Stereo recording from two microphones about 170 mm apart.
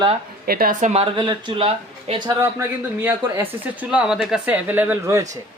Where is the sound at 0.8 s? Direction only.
40° right (ahead or behind).